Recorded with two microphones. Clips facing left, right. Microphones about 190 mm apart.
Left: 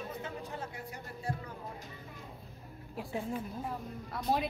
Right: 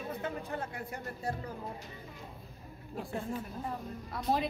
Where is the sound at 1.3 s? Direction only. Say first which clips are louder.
Right 1 dB; 40° right (ahead or behind).